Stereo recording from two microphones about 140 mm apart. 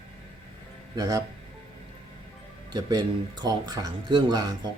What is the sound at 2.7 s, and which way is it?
Speech, 30° right (ahead or behind).